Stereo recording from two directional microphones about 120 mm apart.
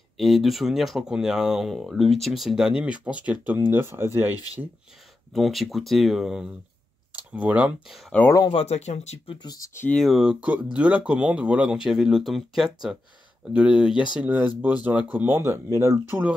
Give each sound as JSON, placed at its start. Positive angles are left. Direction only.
{"t": 0.2, "sound": "speech", "side_deg": 0}
{"t": 5.3, "sound": "speech", "side_deg": 0}
{"t": 8.5, "sound": "speech", "side_deg": 60}
{"t": 9.4, "sound": "speech", "side_deg": 35}
{"t": 9.9, "sound": "speech", "side_deg": 0}